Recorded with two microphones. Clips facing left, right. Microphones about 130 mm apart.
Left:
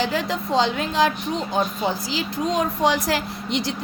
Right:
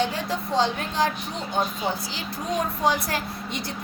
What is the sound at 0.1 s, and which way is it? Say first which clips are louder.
Speech: left 4 dB; 90° left.